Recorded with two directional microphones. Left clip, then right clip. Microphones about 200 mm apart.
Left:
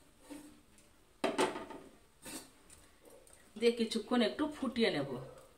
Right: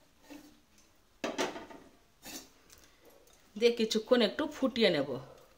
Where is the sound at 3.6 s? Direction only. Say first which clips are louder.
Right 4 dB; 50° right (ahead or behind).